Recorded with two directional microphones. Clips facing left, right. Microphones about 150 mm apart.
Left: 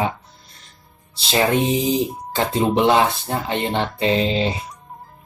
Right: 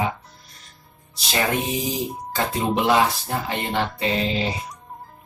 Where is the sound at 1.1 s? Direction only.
25° left (ahead or behind).